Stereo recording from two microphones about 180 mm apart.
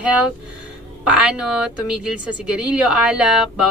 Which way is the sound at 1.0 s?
5° right (ahead or behind).